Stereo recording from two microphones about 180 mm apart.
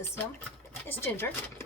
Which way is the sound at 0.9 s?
15° left (ahead or behind).